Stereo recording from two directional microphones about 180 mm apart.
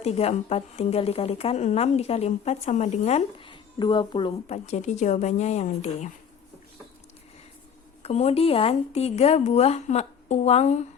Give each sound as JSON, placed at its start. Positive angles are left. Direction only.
{"t": 0.0, "sound": "speech", "side_deg": 35}
{"t": 8.0, "sound": "speech", "side_deg": 35}